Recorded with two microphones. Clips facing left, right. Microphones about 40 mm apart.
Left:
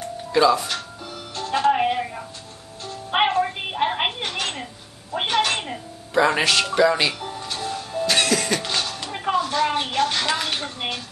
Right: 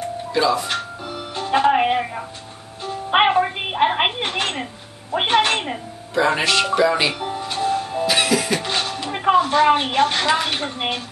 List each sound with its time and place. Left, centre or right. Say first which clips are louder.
0.3 s speech: left 2 dB; centre
0.7 s music: right 5 dB; centre
5.1 s speech: right 4 dB; right
6.1 s speech: even; centre
6.6 s music: right 1 dB; centre